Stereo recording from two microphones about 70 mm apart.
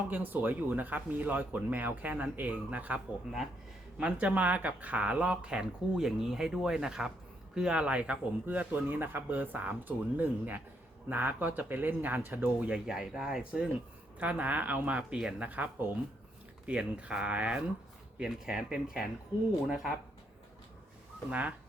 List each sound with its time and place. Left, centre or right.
0.1 s speech: right; by 19.9 s centre
21.2 s speech: centre